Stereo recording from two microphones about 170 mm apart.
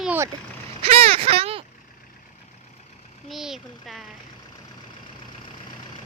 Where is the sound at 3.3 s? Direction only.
Centre (ahead or behind).